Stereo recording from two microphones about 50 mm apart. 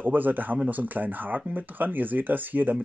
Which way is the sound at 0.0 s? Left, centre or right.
Right.